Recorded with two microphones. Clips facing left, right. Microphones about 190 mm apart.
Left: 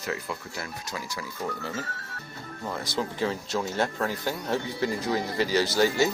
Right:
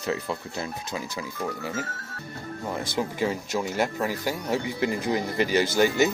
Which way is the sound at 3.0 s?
10° right (ahead or behind).